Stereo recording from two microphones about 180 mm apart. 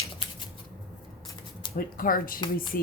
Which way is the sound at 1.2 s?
30° left (ahead or behind).